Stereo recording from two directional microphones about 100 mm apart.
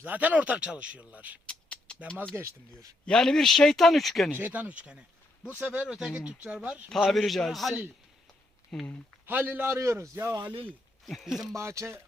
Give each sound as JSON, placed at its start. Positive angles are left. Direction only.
{"t": 0.0, "sound": "speech", "side_deg": -15}
{"t": 1.5, "sound": "a sound", "side_deg": 10}
{"t": 2.3, "sound": "a man's voice", "side_deg": -25}
{"t": 3.1, "sound": "speech", "side_deg": 5}
{"t": 4.4, "sound": "speech", "side_deg": -20}
{"t": 7.1, "sound": "speech", "side_deg": 0}
{"t": 9.2, "sound": "a man's voice", "side_deg": -20}
{"t": 10.3, "sound": "speech", "side_deg": -45}
{"t": 11.5, "sound": "a man's voice", "side_deg": -30}